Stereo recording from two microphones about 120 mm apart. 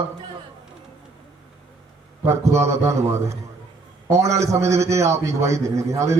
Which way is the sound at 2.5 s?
25° right (ahead or behind).